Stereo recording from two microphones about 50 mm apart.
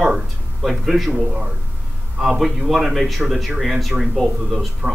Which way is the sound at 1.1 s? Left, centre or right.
Centre.